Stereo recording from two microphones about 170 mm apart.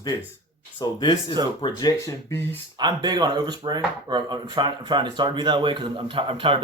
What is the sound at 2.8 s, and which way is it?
Speech, 25° right (ahead or behind).